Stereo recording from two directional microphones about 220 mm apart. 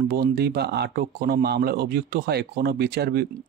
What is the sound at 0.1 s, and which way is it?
Speech, 45° right (ahead or behind).